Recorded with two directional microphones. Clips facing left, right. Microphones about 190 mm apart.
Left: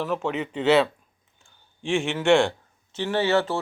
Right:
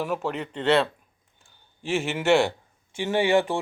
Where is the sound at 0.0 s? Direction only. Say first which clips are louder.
Left 1 dB; 5° right (ahead or behind).